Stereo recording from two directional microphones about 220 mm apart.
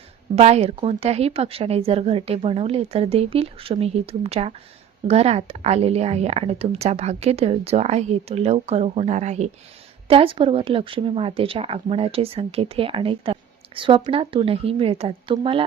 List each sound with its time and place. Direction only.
0.3 s speech: 30° right (ahead or behind)